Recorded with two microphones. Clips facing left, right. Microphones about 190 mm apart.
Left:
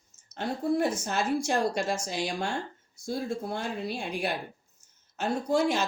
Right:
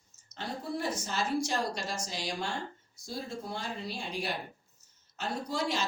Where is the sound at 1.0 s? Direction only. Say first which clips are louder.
Left 4 dB; 55° left (ahead or behind).